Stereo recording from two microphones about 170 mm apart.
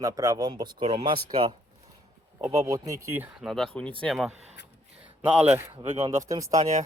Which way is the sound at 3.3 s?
Centre (ahead or behind).